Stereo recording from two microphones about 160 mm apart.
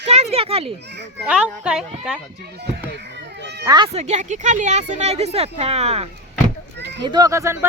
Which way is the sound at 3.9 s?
45° right (ahead or behind).